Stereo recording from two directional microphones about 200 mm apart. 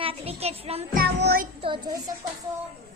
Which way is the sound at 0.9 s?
50° right (ahead or behind).